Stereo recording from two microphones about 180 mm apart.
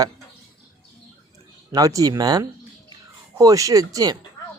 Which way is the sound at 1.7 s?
20° right (ahead or behind).